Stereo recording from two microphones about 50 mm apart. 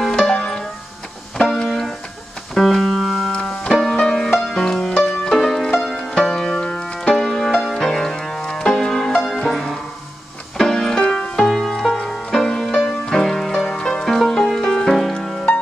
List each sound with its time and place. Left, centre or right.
0.3 s music: centre
3.3 s music: centre
6.6 s music: left
7.1 s music: centre
14.9 s music: centre